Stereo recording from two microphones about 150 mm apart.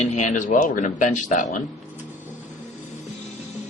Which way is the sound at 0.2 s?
55° left (ahead or behind).